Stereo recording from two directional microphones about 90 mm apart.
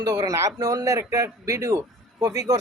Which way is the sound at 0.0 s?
45° right (ahead or behind).